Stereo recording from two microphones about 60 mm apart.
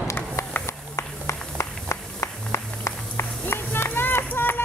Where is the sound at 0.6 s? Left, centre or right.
Left.